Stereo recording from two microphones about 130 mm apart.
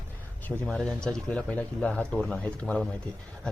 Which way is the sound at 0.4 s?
10° left (ahead or behind).